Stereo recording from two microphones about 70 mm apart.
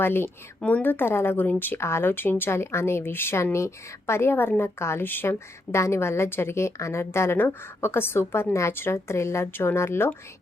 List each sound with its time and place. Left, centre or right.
0.0 s speech: left